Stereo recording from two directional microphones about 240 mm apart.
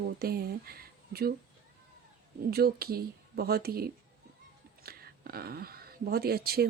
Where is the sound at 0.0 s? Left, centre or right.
Right.